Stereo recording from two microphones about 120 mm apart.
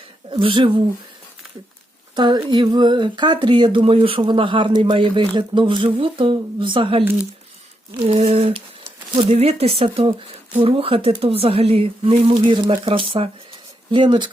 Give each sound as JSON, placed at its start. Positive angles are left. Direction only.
{"t": 0.3, "sound": "speech", "side_deg": -45}
{"t": 2.1, "sound": "speech", "side_deg": -40}
{"t": 8.0, "sound": "speech", "side_deg": -60}
{"t": 9.1, "sound": "speech", "side_deg": -65}